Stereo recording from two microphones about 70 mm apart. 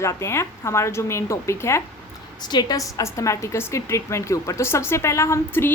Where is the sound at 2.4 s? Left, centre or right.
Left.